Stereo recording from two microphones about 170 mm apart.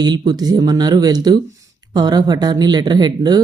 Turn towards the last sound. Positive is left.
turn(degrees=-25)  # may be behind; listen again after turning